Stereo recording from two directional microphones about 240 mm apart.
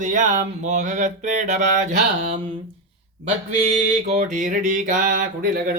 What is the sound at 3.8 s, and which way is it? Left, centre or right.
Mantra, right.